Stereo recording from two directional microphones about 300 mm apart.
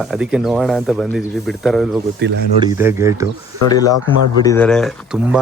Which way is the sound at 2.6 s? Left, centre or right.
Centre.